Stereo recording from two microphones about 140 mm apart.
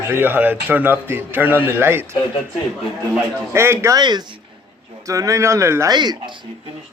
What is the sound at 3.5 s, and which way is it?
Speech, 20° right (ahead or behind).